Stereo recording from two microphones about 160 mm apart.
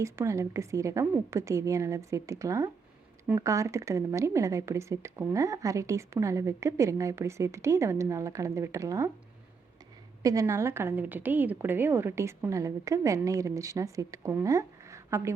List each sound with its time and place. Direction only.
0.0 s a woman's voice: 20° right (ahead or behind)
10.2 s a woman's voice: 20° right (ahead or behind)